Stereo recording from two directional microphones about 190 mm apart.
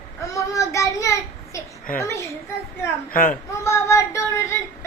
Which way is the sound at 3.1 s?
45° left (ahead or behind).